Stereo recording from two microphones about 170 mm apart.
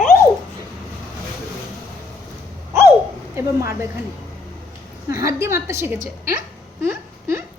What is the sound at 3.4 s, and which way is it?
Speech, 15° right (ahead or behind).